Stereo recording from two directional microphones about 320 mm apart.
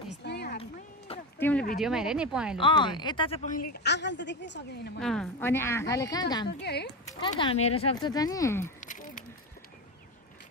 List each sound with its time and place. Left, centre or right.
0.2 s a sound: left
0.6 s a sound: centre
1.4 s speech: centre
2.6 s speech: centre
3.7 s a woman's voice: left
5.0 s speech: centre
6.6 s a woman's voice: left
7.1 s speech: centre
8.8 s a sound: left